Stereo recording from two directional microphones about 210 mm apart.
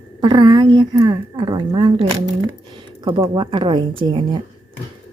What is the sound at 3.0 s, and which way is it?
A woman's voice, 20° right (ahead or behind).